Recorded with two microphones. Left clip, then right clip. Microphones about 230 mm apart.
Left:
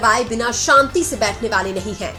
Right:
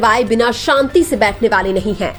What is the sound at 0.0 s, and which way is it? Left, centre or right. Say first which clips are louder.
A woman's voice: right 4 dB; right.